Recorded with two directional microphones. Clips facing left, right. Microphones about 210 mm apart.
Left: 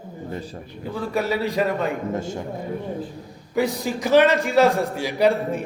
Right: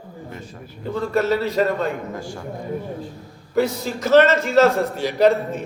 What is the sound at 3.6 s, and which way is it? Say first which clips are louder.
A man's voice: right 2 dB; 15° left (ahead or behind).